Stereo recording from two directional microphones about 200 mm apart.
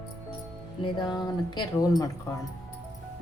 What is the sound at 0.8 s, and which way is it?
A woman's voice, 25° left (ahead or behind).